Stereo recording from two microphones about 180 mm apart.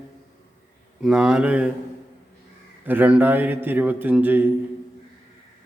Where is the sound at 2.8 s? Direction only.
10° right (ahead or behind).